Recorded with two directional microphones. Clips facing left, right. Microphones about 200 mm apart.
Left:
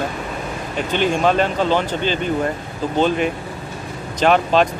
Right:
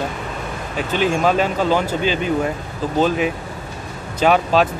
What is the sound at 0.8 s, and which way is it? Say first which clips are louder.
Speech: even; 5° right (ahead or behind).